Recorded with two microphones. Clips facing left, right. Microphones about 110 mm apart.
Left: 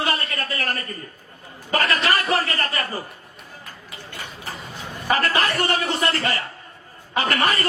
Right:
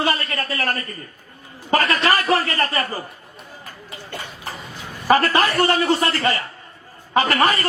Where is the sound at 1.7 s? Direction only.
35° right (ahead or behind).